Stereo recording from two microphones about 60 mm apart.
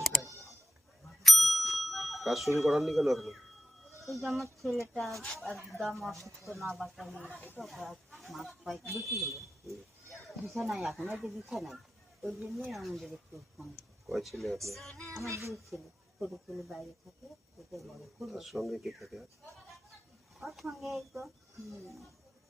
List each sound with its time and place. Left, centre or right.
0.0 s a sound: centre
1.2 s bicycle bell: centre
2.6 s speech: centre
4.6 s speech: centre
10.4 s speech: centre
15.3 s a child's voice: right
16.2 s speech: centre
20.4 s speech: centre